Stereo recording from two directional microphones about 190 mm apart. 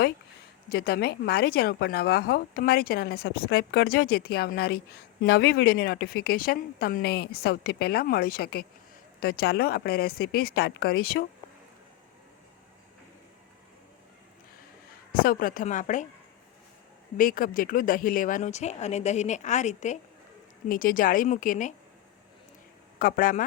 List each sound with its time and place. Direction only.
0.7 s a woman's voice: 55° left (ahead or behind)
15.1 s a woman's voice: 50° left (ahead or behind)
17.2 s a woman's voice: 45° left (ahead or behind)
23.0 s a woman's voice: 50° left (ahead or behind)